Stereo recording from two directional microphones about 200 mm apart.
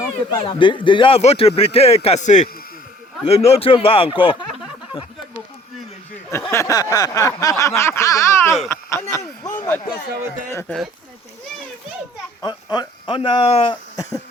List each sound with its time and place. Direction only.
0.3 s speech: 25° left (ahead or behind)
6.5 s speech: 15° left (ahead or behind)
12.7 s speech: 20° left (ahead or behind)